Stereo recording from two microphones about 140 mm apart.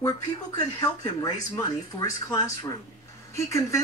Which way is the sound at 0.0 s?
25° left (ahead or behind).